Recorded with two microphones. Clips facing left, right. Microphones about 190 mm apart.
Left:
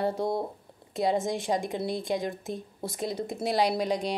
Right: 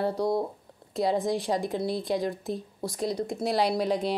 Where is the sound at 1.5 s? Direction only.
10° left (ahead or behind).